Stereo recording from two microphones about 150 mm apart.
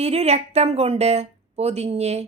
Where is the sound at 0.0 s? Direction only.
45° right (ahead or behind).